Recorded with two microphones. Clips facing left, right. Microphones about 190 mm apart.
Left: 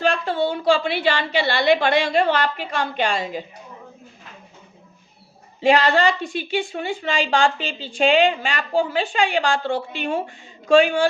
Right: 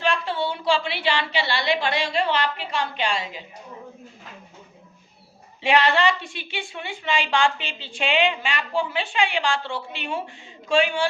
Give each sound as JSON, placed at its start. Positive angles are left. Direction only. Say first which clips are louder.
{"t": 0.0, "sound": "a woman's voice", "louder": "left 4 dB", "side_deg": 45}
{"t": 5.5, "sound": "a woman's voice", "louder": "left 3 dB", "side_deg": 40}